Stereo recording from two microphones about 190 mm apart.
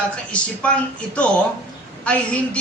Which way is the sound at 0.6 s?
5° left (ahead or behind).